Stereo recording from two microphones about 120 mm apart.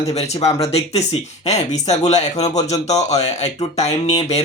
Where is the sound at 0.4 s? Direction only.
60° left (ahead or behind).